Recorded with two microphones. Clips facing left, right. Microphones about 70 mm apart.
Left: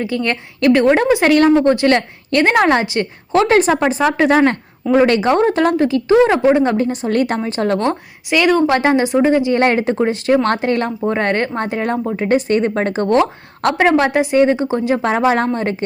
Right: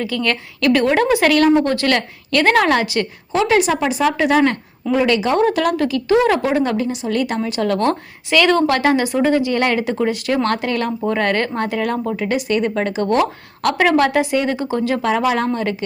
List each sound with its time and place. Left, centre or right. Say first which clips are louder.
0.0 s speech: left 1 dB; left
3.3 s speech: left 3 dB; left
15.1 s speech: left 3 dB; left